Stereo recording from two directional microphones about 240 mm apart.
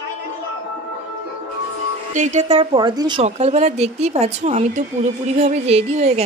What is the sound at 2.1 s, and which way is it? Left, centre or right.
A woman's voice, right.